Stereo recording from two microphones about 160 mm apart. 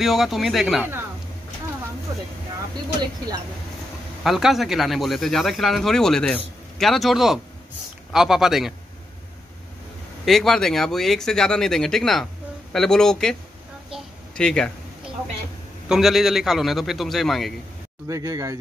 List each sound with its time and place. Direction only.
0.0 s speech: centre (ahead or behind)
4.2 s speech: centre (ahead or behind)
10.2 s speech: centre (ahead or behind)
13.9 s a sound: 5° left (ahead or behind)
15.9 s speech: centre (ahead or behind)
18.0 s speech: 20° right (ahead or behind)